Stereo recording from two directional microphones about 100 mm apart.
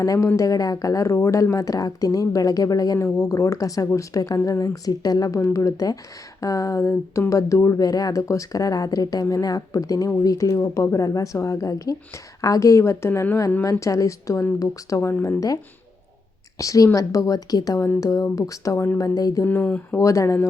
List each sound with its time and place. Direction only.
0.0 s a woman's voice: 30° left (ahead or behind)
16.6 s a woman's voice: 35° left (ahead or behind)
19.5 s speech: 15° left (ahead or behind)
20.0 s speech: 30° left (ahead or behind)